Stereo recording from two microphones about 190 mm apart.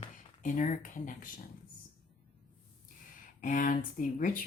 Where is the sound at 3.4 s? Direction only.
45° left (ahead or behind).